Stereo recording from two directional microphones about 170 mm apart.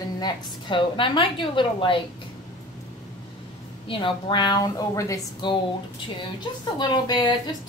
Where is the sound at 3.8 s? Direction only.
30° left (ahead or behind).